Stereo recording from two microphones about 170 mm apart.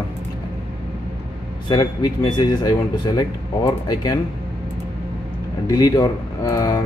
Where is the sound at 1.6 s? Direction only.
25° left (ahead or behind).